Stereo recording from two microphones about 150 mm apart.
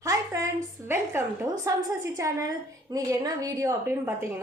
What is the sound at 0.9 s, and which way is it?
A woman's voice, 15° right (ahead or behind).